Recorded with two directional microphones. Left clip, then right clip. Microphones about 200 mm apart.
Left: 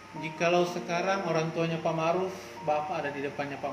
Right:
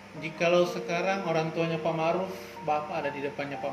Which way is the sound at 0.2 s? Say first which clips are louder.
Right 2 dB; 15° right (ahead or behind).